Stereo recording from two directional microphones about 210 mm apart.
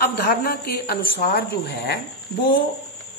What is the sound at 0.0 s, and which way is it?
A woman's voice, 50° left (ahead or behind).